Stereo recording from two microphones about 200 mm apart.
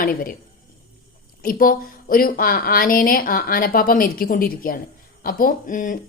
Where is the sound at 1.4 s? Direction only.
45° left (ahead or behind).